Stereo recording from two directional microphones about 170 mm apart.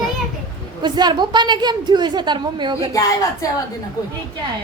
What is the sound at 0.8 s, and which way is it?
A woman's voice, 25° right (ahead or behind).